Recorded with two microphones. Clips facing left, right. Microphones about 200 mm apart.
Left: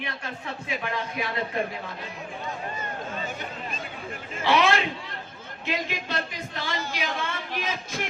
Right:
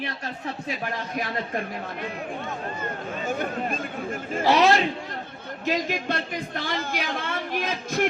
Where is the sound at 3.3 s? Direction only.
50° right (ahead or behind).